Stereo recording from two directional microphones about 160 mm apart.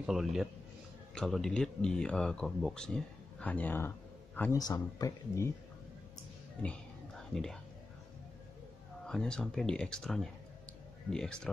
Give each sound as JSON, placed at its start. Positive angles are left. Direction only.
{"t": 0.0, "sound": "speech", "side_deg": 0}
{"t": 9.0, "sound": "speech", "side_deg": 5}